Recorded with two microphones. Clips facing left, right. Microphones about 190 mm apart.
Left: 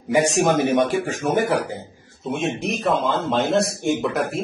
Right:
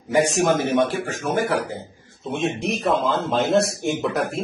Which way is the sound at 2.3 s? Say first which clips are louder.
Right 1 dB; centre (ahead or behind).